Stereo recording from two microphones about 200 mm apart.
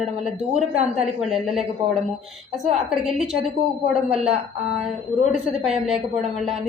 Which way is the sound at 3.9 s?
30° right (ahead or behind).